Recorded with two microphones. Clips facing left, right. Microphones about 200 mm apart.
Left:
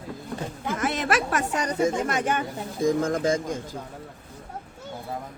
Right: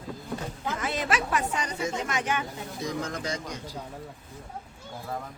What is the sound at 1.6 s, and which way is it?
A man's voice, 50° left (ahead or behind).